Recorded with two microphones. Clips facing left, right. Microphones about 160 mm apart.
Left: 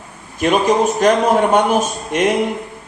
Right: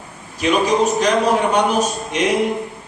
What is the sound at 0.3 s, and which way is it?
A man's voice, 50° left (ahead or behind).